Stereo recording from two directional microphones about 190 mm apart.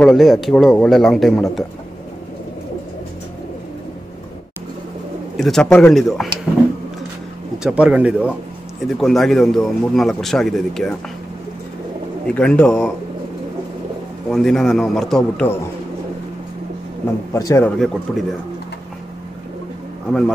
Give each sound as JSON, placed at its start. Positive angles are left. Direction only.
{"t": 0.0, "sound": "a man's voice", "side_deg": 0}
{"t": 5.4, "sound": "a man's voice", "side_deg": 5}
{"t": 7.5, "sound": "a man's voice", "side_deg": -5}
{"t": 12.3, "sound": "a man's voice", "side_deg": 5}
{"t": 14.3, "sound": "a man's voice", "side_deg": 0}
{"t": 17.3, "sound": "a man's voice", "side_deg": 15}
{"t": 17.7, "sound": "a man's voice", "side_deg": 0}